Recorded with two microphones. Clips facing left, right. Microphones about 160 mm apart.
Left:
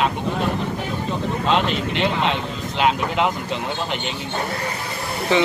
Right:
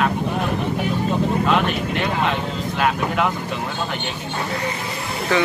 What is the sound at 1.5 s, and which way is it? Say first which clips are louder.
Speech: even; 25° left (ahead or behind).